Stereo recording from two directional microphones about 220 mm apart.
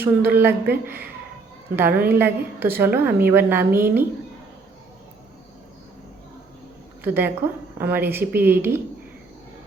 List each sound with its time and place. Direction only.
0.3 s a woman's voice: 10° right (ahead or behind)
7.0 s a woman's voice: 10° right (ahead or behind)